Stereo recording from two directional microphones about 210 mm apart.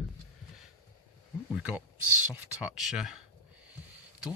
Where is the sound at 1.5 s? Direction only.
5° right (ahead or behind).